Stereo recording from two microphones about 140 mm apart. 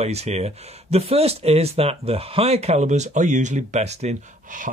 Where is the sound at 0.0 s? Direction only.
50° right (ahead or behind).